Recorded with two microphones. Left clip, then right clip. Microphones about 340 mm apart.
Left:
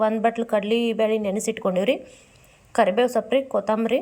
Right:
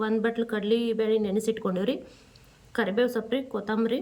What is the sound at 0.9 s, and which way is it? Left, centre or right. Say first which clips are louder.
Speech: left 4 dB; left.